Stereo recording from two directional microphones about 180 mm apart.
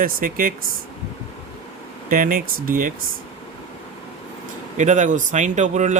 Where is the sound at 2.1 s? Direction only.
50° right (ahead or behind).